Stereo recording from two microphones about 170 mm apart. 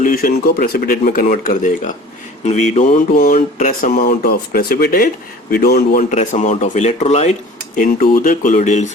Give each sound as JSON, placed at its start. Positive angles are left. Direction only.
{"t": 0.0, "sound": "speech", "side_deg": 55}
{"t": 2.4, "sound": "speech", "side_deg": 40}
{"t": 6.0, "sound": "speech", "side_deg": 40}
{"t": 7.8, "sound": "speech", "side_deg": 55}